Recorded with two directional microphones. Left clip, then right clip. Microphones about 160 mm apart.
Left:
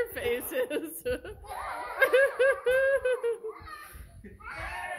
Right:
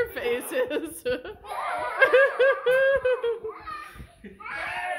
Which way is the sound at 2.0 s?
5° left (ahead or behind).